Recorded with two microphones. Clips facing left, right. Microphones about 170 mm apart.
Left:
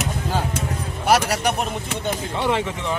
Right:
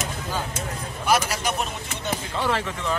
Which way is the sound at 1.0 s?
70° left (ahead or behind).